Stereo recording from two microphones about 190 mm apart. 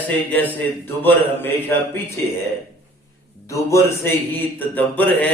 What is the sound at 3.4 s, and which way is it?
A man's voice, 15° left (ahead or behind).